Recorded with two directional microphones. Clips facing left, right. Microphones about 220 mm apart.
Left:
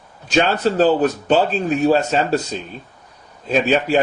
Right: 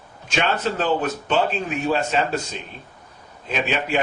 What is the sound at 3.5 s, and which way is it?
Speech, 40° left (ahead or behind).